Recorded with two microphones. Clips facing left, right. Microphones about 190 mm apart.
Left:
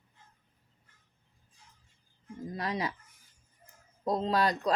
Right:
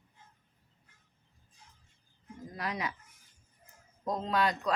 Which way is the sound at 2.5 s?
30° left (ahead or behind).